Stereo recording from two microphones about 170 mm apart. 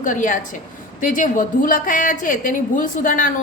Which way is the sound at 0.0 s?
50° left (ahead or behind).